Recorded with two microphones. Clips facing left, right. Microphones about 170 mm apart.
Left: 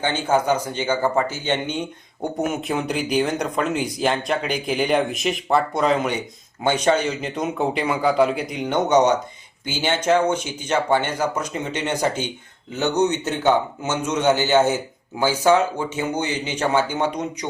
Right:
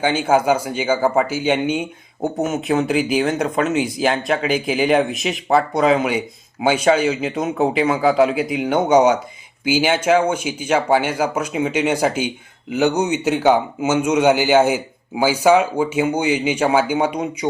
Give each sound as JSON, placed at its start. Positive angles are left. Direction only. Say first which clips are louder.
{"t": 0.0, "sound": "a man's voice", "louder": "right 4 dB", "side_deg": -10}